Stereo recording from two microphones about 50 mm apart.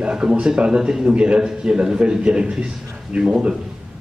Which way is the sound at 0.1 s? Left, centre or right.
Centre.